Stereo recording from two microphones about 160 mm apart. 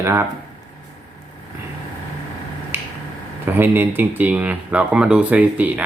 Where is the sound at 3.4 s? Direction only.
15° right (ahead or behind).